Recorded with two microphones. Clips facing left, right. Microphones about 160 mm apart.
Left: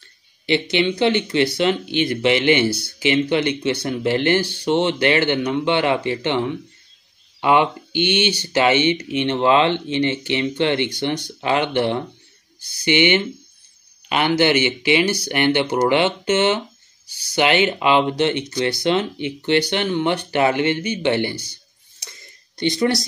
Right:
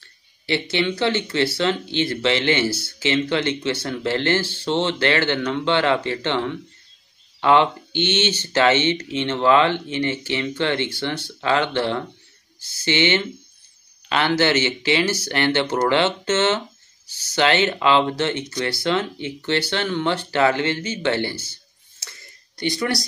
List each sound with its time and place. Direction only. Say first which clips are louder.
0.5 s speech: left 3 dB; 20° left (ahead or behind)
22.6 s speech: left 4 dB; 20° left (ahead or behind)